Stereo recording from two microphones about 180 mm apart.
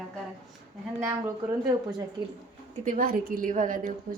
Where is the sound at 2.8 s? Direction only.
50° right (ahead or behind).